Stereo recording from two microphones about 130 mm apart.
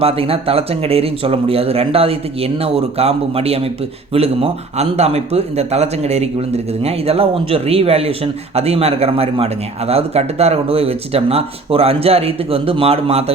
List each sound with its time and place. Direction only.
0.0 s speech: 45° right (ahead or behind)